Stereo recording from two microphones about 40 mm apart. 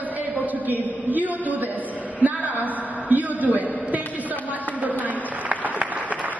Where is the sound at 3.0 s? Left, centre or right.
Right.